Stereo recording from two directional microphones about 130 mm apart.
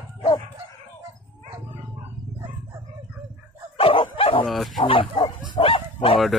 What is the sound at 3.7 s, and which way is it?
Dog, 40° left (ahead or behind).